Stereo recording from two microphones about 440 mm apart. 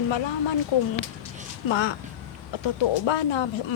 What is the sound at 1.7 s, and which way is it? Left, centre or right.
A woman's voice, left.